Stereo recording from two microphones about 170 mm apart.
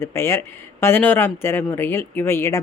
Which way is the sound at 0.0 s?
15° left (ahead or behind).